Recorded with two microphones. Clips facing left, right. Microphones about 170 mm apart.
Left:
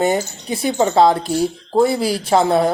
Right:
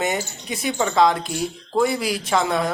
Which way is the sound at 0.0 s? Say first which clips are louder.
Left 6 dB; 35° left (ahead or behind).